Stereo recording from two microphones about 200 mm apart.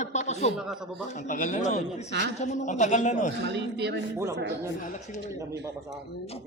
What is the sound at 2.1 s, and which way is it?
Speech, 60° right (ahead or behind).